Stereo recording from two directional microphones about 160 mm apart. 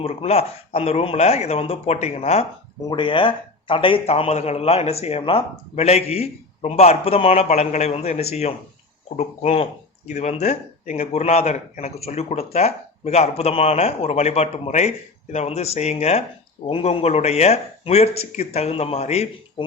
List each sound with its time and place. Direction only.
0.0 s speech: 40° left (ahead or behind)